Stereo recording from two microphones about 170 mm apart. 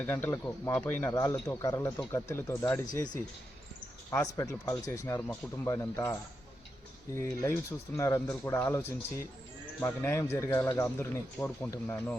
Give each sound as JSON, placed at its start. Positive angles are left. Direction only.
{"t": 0.0, "sound": "a man's voice", "side_deg": 10}
{"t": 4.1, "sound": "a man's voice", "side_deg": 20}
{"t": 7.2, "sound": "a man's voice", "side_deg": 15}